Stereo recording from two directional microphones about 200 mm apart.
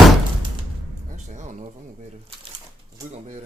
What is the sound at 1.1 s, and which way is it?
Music, 40° right (ahead or behind).